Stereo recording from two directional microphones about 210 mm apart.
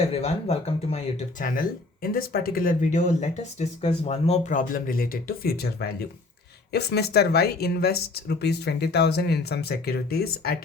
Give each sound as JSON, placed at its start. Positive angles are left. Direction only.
{"t": 0.1, "sound": "speech", "side_deg": 30}